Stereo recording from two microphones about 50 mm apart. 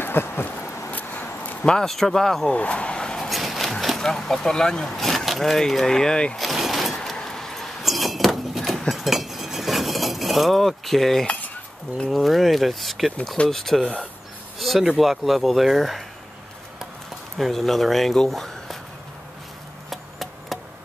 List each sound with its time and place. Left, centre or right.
0.0 s a sound: left
0.8 s vehicle: left
1.6 s speech: centre
1.9 s speech: centre
2.5 s vehicle: left
3.3 s a sound: centre
4.0 s speech: centre
6.3 s vehicle: centre
7.0 s vehicle: centre
7.8 s chink: centre
12.1 s speech: centre
17.4 s speech: centre
19.9 s a sound: centre